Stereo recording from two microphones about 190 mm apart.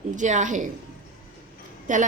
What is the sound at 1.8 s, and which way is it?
Speech, 40° right (ahead or behind).